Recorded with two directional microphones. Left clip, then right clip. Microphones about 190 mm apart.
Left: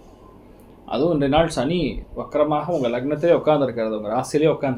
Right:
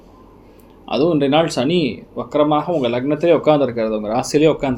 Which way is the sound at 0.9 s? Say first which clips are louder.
Right 4 dB; 40° right (ahead or behind).